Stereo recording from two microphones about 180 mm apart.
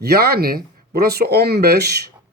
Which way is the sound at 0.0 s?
60° right (ahead or behind).